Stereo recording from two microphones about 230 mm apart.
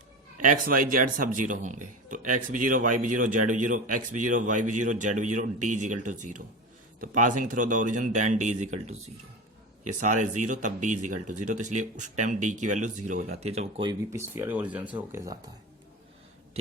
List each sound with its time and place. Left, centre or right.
0.3 s speech: right
14.1 s speech: centre